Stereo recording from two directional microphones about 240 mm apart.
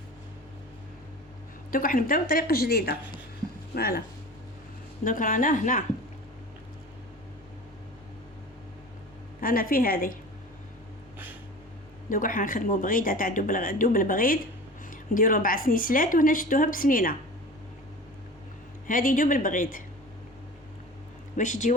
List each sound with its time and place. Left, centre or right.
1.7 s speech: left
5.0 s speech: left
9.4 s speech: left
12.0 s speech: left
18.9 s speech: left
21.3 s speech: left